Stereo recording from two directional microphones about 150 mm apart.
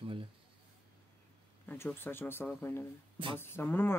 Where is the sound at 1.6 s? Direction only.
15° left (ahead or behind).